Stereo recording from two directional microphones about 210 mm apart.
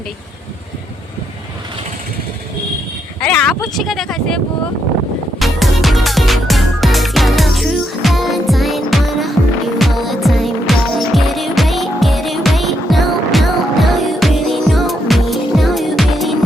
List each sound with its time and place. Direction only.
3.2 s speech: 5° left (ahead or behind)
5.4 s music: centre (ahead or behind)